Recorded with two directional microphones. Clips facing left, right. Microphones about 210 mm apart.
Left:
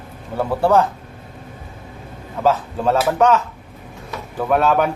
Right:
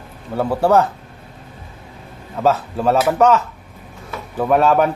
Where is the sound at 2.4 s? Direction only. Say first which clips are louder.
Right 1 dB; 10° right (ahead or behind).